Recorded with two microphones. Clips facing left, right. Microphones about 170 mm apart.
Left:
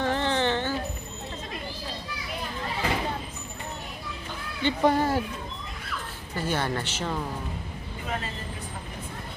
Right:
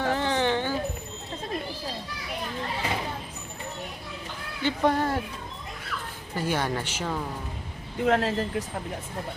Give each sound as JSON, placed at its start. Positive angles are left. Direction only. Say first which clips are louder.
{"t": 0.0, "sound": "a sound", "louder": "even", "side_deg": -10}
{"t": 4.6, "sound": "speech", "louder": "left 1 dB", "side_deg": 0}
{"t": 6.3, "sound": "a woman's voice", "louder": "right 1 dB", "side_deg": -10}
{"t": 8.0, "sound": "speech", "louder": "right 11 dB", "side_deg": -80}